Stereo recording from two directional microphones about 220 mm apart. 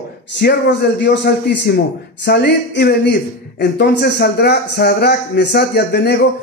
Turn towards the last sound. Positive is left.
turn(degrees=45)  # may be behind; listen again after turning